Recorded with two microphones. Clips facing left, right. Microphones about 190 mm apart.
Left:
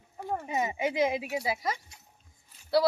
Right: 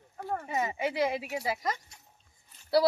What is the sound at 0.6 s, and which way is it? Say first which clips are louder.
A woman's voice: left 2 dB; 15° left (ahead or behind).